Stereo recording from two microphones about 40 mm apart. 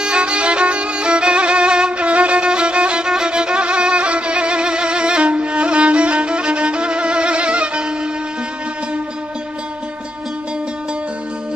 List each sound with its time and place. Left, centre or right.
0.0 s violin: right